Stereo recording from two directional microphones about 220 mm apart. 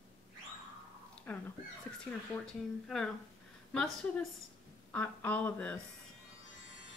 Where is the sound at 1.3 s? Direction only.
5° left (ahead or behind).